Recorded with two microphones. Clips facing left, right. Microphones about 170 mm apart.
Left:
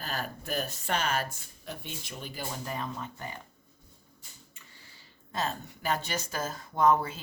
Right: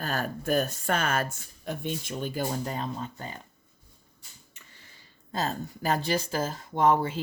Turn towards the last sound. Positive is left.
turn(degrees=-25)  # may be behind; listen again after turning